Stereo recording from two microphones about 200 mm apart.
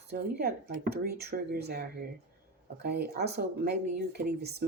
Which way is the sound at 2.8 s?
55° right (ahead or behind).